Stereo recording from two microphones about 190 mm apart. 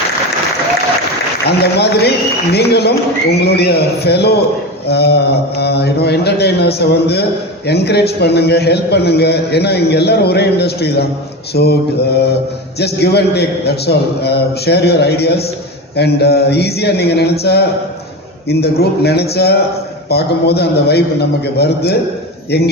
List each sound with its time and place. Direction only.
1.5 s a man's voice: 60° left (ahead or behind)